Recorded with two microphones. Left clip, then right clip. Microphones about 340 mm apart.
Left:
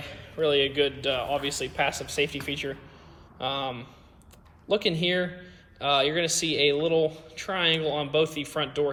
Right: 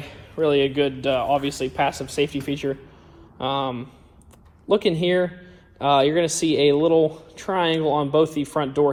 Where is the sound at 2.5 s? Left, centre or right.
Right.